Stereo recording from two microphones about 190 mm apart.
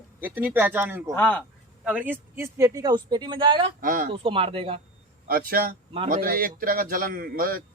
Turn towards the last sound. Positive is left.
turn(degrees=-50)  # may be behind; listen again after turning